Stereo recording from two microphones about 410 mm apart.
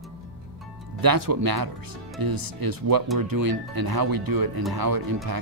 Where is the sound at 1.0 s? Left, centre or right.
Right.